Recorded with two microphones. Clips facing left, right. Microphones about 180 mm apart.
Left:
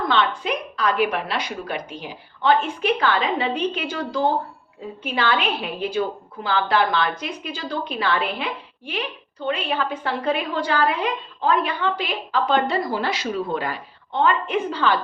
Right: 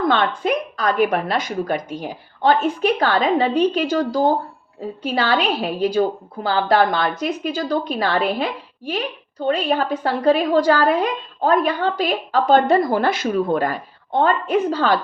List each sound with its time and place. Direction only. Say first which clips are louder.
0.1 s a woman's voice: right 3 dB; 50° right (ahead or behind)